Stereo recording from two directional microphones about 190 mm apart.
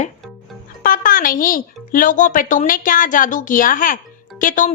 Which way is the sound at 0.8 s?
50° left (ahead or behind).